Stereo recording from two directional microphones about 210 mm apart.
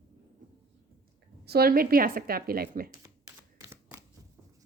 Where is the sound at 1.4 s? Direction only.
50° right (ahead or behind).